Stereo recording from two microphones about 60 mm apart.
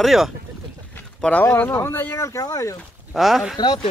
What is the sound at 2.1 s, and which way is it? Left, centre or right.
Speech, left.